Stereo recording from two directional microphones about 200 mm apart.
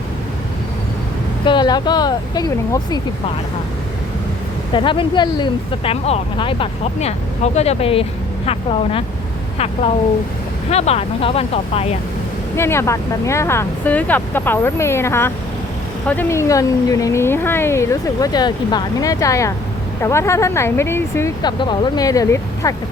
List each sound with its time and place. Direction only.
1.5 s speech: 20° left (ahead or behind)
4.7 s speech: 25° left (ahead or behind)
10.7 s speech: 30° left (ahead or behind)
12.5 s speech: 15° left (ahead or behind)